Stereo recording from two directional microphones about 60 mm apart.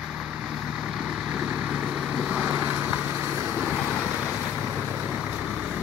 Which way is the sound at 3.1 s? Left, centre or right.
Right.